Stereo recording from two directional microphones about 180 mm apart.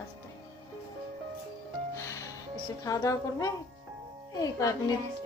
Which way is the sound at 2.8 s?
20° left (ahead or behind).